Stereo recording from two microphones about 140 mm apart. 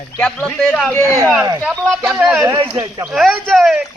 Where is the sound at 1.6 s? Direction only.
Centre (ahead or behind).